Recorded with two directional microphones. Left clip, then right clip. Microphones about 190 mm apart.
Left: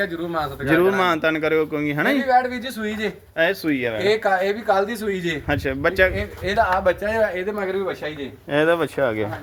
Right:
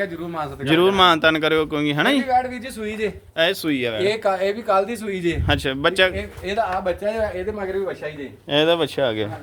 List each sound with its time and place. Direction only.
0.6 s speech: 15° right (ahead or behind)
2.8 s a man's voice: 30° right (ahead or behind)
4.0 s a man's voice: 35° right (ahead or behind); by 6.1 s 10° right (ahead or behind)
6.4 s speech: 10° left (ahead or behind); by 7.7 s 25° left (ahead or behind)
8.4 s speech: 15° right (ahead or behind)